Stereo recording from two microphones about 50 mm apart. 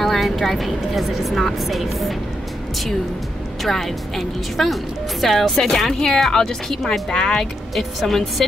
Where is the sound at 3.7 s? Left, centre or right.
Centre.